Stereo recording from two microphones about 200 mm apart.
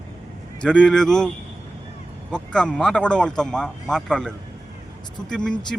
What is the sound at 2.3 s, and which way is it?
Speech, 5° left (ahead or behind).